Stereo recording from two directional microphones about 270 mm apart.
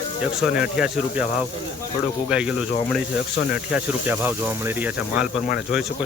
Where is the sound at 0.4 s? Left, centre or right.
Centre.